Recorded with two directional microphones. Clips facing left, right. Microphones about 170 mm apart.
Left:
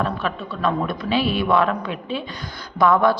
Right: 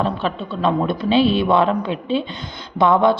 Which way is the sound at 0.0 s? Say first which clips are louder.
Right 3 dB; 30° right (ahead or behind).